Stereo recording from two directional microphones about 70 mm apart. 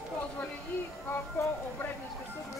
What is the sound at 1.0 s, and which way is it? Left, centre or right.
Speech, left.